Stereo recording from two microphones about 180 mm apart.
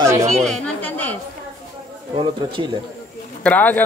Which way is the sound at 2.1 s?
25° right (ahead or behind).